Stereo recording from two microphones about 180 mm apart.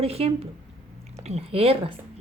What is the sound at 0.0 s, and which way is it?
A woman's voice, 35° right (ahead or behind).